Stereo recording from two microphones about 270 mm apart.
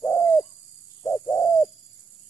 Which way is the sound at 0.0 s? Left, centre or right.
Centre.